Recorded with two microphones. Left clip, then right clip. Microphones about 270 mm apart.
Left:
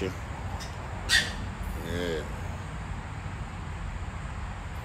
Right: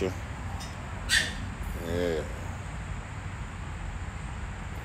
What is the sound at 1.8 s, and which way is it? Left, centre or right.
Speech, centre.